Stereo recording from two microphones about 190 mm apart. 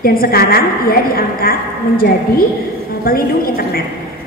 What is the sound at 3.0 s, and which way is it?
Speech, 50° left (ahead or behind).